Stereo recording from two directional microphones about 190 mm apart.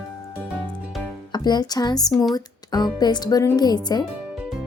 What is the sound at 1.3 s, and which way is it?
Speech, 20° left (ahead or behind).